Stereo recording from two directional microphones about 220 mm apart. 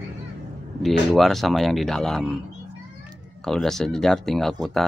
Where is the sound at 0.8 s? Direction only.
Centre (ahead or behind).